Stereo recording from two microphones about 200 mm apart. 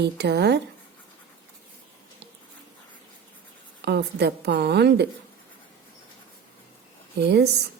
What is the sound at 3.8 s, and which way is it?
A woman's voice, 55° right (ahead or behind).